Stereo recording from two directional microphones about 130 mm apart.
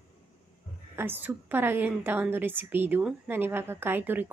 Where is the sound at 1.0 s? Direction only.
15° right (ahead or behind).